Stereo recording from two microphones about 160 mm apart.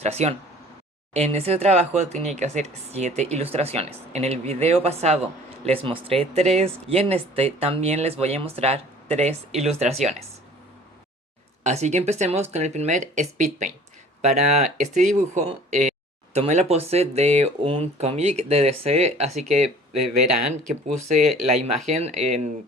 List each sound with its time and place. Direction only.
0.0 s speech: 40° right (ahead or behind)
11.6 s speech: 45° right (ahead or behind)
20.7 s speech: 45° right (ahead or behind)